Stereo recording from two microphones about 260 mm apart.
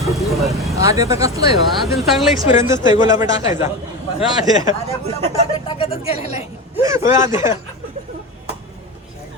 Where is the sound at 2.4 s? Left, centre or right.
Centre.